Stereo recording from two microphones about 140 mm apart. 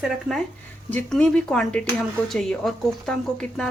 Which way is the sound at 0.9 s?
10° left (ahead or behind).